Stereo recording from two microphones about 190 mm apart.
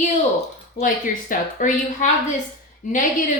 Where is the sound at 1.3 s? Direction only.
40° left (ahead or behind).